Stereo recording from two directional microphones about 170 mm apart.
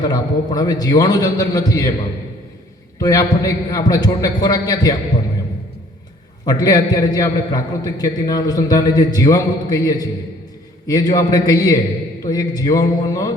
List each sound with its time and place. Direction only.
0.0 s a man's voice: 25° left (ahead or behind)
3.0 s a man's voice: 20° left (ahead or behind)
6.4 s a man's voice: 20° left (ahead or behind)